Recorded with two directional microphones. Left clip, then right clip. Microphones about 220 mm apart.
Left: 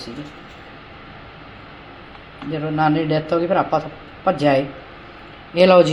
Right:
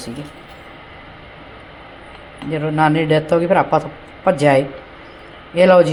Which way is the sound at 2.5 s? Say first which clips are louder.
Right 3 dB; 15° right (ahead or behind).